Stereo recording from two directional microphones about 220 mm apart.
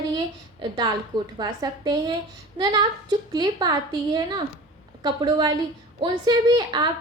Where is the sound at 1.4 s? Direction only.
20° right (ahead or behind).